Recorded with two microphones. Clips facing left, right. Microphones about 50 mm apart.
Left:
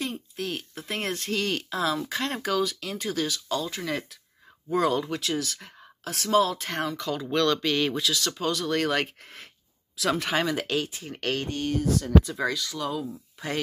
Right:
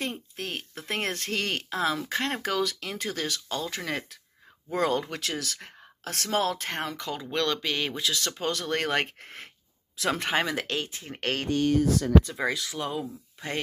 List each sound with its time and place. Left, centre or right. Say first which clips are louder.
0.0 s speech: left 2 dB; right
2.6 s speech: left 1 dB; right
6.0 s speech: left 4 dB; right
7.2 s speech: left 4 dB; centre
8.1 s speech: left 2 dB; right
10.5 s speech: left 3 dB; centre
10.8 s speech: left 3 dB; centre
11.3 s speech: right 6 dB; right
12.4 s speech: left 1 dB; centre
12.8 s speech: left 3 dB; right